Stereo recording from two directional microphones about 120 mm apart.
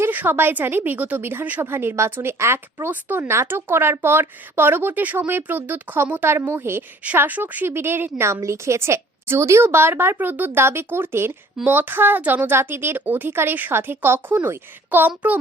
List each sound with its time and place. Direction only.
0.0 s a woman's voice: 15° right (ahead or behind)